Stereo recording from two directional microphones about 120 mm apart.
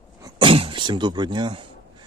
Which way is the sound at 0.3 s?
50° right (ahead or behind).